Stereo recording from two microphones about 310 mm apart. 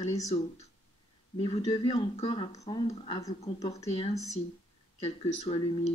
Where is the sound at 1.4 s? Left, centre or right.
Centre.